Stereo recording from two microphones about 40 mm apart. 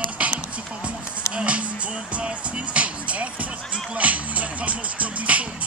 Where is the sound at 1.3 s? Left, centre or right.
Right.